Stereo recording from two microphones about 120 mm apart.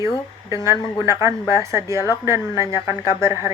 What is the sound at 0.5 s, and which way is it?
A woman's voice, 25° right (ahead or behind).